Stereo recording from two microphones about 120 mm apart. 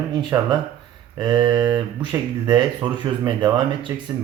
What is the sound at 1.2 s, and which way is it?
A man's voice, 35° right (ahead or behind).